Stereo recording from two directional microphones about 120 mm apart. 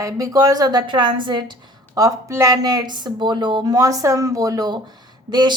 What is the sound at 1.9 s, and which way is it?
A woman's voice, 30° right (ahead or behind).